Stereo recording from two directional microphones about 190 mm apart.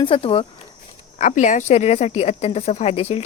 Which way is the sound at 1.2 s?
40° left (ahead or behind).